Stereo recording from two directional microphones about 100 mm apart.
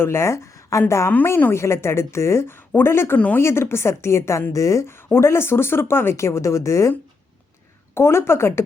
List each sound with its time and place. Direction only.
0.0 s a woman's voice: 25° left (ahead or behind)
7.9 s a woman's voice: 25° left (ahead or behind)